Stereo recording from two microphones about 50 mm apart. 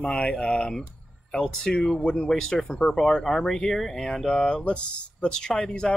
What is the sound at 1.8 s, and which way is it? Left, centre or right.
Speech, centre.